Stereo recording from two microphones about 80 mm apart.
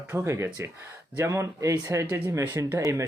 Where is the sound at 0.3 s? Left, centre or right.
Right.